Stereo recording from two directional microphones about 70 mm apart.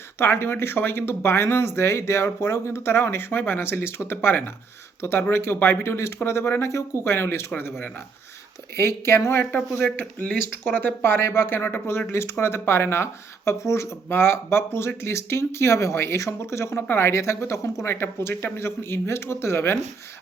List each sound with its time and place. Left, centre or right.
0.2 s speech: left
8.7 s speech: left